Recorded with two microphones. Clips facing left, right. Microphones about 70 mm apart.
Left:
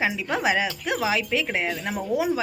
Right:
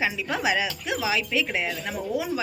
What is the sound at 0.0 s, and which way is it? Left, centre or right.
A woman's voice, left.